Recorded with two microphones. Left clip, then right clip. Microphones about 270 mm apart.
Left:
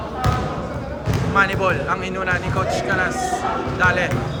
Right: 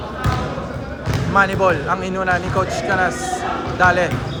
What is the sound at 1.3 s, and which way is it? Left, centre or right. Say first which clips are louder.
Speech: right 3 dB; centre.